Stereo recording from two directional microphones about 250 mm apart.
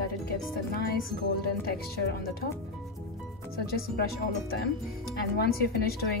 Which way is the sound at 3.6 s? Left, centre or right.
Left.